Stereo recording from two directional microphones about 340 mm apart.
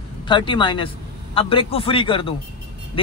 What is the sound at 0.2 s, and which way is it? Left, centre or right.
Speech, centre.